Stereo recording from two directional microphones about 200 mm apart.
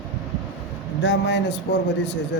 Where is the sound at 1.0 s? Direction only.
60° left (ahead or behind).